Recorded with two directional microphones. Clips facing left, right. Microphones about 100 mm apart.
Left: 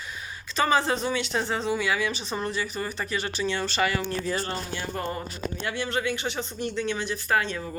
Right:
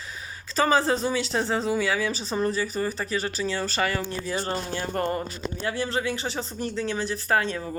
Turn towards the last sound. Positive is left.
turn(degrees=-35)  # may be behind; listen again after turning